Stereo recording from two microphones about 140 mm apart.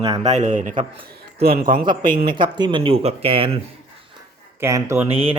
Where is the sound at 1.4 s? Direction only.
90° right.